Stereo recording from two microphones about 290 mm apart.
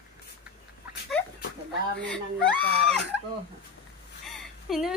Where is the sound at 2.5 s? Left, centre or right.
Centre.